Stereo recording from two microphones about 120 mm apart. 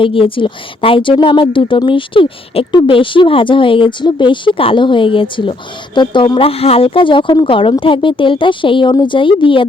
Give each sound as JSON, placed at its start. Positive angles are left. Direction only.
{"t": 0.0, "sound": "a woman's voice", "side_deg": 50}